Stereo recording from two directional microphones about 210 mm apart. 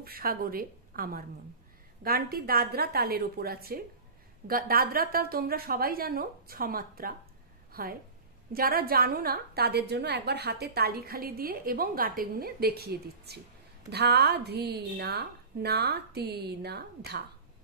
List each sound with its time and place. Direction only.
0.0 s a woman's voice: 45° right (ahead or behind)